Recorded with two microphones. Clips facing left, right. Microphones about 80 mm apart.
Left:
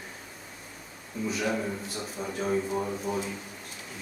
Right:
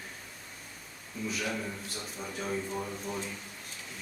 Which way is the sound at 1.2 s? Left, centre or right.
Centre.